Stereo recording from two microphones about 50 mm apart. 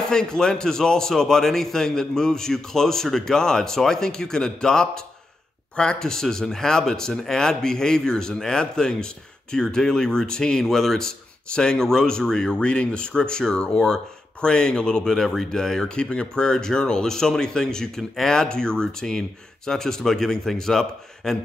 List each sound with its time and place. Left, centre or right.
0.1 s speech: centre
15.1 s speech: centre